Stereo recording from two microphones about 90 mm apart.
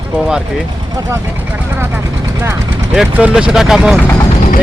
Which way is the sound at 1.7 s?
25° right (ahead or behind).